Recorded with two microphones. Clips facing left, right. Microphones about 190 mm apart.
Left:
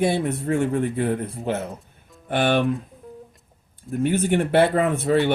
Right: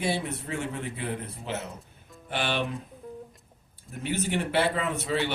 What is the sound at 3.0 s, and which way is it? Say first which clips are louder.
Music: even; centre (ahead or behind).